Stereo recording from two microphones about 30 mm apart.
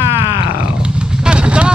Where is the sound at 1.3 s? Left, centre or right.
Right.